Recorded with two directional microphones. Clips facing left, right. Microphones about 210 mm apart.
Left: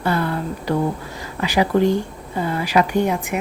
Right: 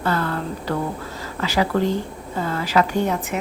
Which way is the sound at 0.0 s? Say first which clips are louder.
Left 2 dB; 15° left (ahead or behind).